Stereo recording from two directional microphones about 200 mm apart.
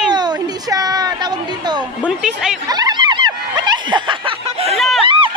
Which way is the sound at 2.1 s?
5° right (ahead or behind).